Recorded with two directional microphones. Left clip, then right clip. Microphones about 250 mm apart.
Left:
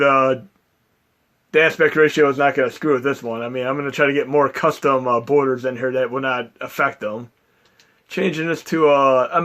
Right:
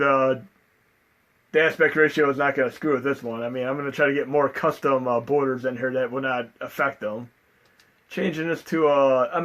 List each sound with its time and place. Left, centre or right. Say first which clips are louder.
0.0 s speech: left 5 dB; left
1.5 s speech: left 4 dB; left